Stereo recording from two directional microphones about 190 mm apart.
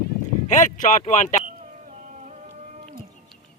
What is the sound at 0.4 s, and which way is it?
Speech, 40° left (ahead or behind).